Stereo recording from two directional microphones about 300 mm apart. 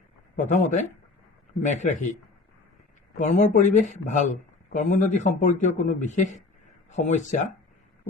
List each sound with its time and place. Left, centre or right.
0.3 s speech: left
3.2 s speech: left